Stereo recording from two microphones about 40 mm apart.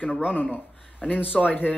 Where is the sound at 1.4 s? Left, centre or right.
Left.